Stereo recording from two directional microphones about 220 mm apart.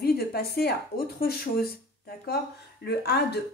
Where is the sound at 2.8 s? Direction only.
45° left (ahead or behind).